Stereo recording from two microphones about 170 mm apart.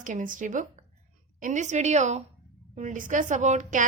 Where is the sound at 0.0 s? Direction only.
50° right (ahead or behind).